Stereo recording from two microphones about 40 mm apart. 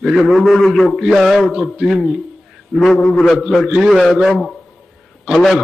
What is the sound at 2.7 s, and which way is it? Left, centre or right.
Speech, right.